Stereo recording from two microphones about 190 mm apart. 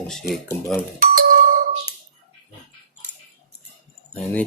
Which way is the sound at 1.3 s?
45° right (ahead or behind).